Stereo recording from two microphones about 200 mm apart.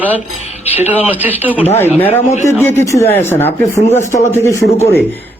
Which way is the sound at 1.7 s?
10° left (ahead or behind).